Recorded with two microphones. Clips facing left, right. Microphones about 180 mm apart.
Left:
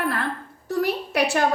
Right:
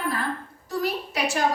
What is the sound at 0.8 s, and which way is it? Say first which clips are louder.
Speech: left 4 dB; 60° left (ahead or behind).